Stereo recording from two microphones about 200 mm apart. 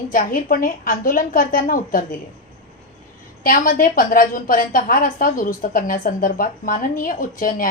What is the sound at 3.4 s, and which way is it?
A woman's voice, 45° left (ahead or behind).